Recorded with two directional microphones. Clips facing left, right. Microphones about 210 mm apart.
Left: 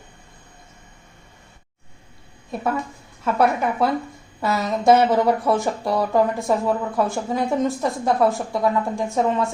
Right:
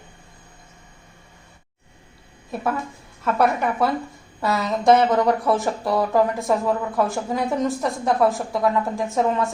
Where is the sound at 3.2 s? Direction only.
Centre (ahead or behind).